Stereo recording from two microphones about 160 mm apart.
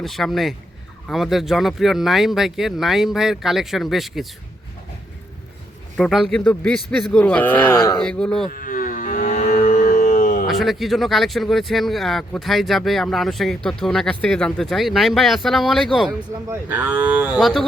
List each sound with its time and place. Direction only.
0.0 s speech: centre (ahead or behind)
6.0 s speech: centre (ahead or behind)
8.4 s moo: 55° left (ahead or behind)
10.4 s speech: centre (ahead or behind)
16.5 s speech: 10° right (ahead or behind)